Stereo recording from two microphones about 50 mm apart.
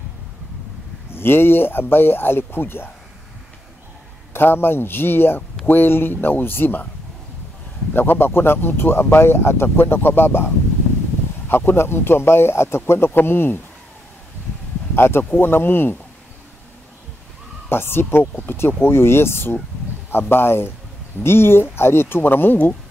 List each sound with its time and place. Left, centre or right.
1.1 s speech: left
4.3 s speech: left
7.9 s speech: left
15.0 s speech: left
17.6 s speech: left